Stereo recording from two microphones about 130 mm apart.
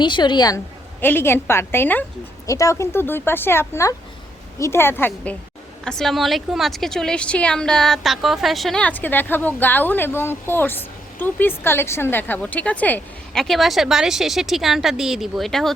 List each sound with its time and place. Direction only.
0.0 s a woman's voice: 35° left (ahead or behind)
1.0 s a woman's voice: 15° left (ahead or behind)
13.4 s speech: centre (ahead or behind)